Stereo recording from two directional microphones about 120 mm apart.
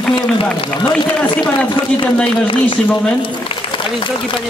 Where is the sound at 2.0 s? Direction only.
10° left (ahead or behind).